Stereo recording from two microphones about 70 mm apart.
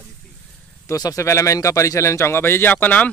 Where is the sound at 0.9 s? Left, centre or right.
Left.